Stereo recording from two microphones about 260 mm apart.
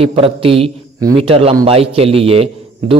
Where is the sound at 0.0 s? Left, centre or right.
Right.